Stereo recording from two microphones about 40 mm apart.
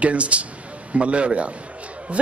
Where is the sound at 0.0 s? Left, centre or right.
Right.